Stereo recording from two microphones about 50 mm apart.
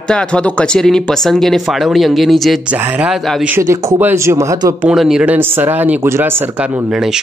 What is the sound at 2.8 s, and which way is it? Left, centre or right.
Speech, right.